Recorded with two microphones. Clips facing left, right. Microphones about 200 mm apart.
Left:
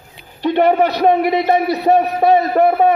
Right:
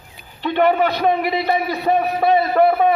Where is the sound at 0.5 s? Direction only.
40° left (ahead or behind).